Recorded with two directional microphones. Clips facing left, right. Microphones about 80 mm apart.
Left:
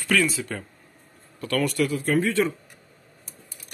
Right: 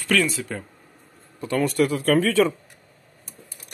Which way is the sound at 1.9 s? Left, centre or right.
Right.